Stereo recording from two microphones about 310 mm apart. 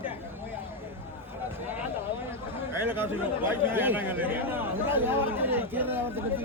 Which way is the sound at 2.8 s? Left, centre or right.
Centre.